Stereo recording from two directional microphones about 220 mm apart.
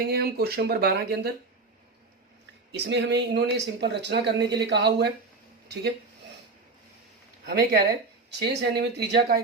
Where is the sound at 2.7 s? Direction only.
50° right (ahead or behind).